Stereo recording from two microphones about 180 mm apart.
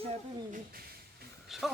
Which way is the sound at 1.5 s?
Centre (ahead or behind).